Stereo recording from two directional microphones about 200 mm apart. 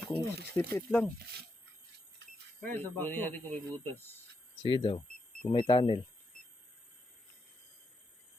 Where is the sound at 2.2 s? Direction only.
60° right (ahead or behind).